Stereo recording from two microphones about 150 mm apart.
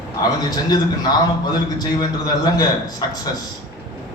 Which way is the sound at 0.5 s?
25° left (ahead or behind).